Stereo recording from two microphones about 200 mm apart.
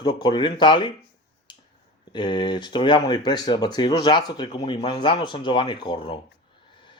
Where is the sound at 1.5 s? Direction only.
25° left (ahead or behind).